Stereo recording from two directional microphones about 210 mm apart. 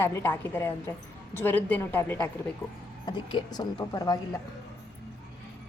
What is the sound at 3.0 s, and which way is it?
Speech, 20° left (ahead or behind).